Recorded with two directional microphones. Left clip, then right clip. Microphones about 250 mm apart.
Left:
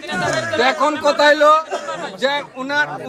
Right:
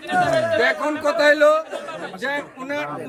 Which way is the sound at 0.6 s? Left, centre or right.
Centre.